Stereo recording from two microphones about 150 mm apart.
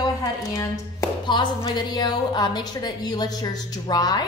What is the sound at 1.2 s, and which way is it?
A woman's voice, 30° left (ahead or behind).